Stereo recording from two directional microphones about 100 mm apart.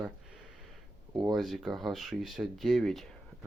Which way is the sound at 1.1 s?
40° right (ahead or behind).